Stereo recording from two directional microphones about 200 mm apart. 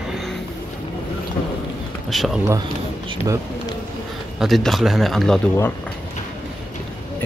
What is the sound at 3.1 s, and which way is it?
Speech, 20° right (ahead or behind).